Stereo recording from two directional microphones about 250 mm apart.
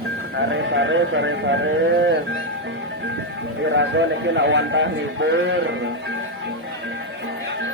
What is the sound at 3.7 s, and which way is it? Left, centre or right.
A man's voice, right.